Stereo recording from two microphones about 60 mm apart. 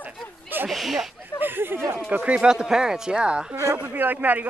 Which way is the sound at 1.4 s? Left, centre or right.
Right.